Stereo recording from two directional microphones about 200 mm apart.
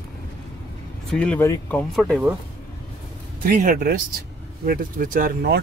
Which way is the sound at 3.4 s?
45° right (ahead or behind).